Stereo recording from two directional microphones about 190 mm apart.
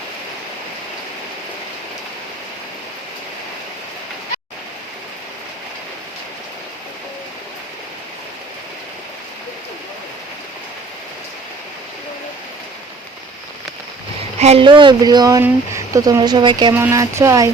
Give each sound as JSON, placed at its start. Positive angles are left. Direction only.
{"t": 14.3, "sound": "speech", "side_deg": -35}
{"t": 16.7, "sound": "speech", "side_deg": -15}